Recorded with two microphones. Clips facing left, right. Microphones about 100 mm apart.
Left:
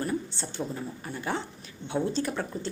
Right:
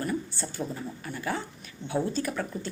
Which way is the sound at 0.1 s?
25° left (ahead or behind).